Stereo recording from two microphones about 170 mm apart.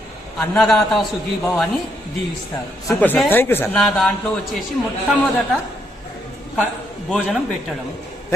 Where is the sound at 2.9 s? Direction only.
10° left (ahead or behind).